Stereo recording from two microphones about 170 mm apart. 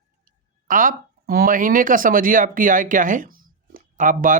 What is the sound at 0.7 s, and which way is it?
Speech, 50° right (ahead or behind).